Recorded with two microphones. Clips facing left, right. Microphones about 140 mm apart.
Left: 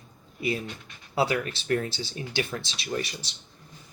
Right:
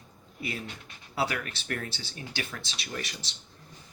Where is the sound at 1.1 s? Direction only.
20° left (ahead or behind).